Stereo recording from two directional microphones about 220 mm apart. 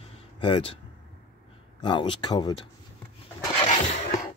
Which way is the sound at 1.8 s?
20° left (ahead or behind).